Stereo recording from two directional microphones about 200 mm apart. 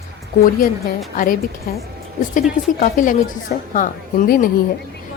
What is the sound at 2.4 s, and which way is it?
A woman's voice, 40° left (ahead or behind).